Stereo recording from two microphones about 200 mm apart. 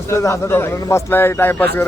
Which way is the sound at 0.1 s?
15° left (ahead or behind).